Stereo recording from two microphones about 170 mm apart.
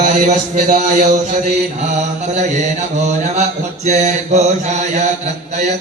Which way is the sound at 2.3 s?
45° right (ahead or behind).